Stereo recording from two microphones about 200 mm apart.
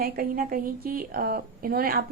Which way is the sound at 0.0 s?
45° right (ahead or behind).